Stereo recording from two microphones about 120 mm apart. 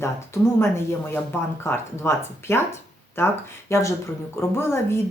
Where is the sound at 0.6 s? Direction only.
20° left (ahead or behind).